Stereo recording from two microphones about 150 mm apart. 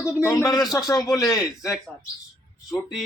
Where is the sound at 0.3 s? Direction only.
20° left (ahead or behind).